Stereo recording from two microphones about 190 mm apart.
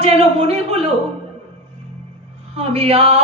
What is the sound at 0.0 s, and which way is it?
Music, 35° right (ahead or behind).